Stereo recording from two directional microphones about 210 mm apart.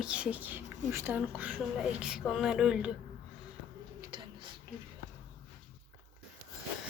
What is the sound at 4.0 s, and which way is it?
Bird, 20° right (ahead or behind).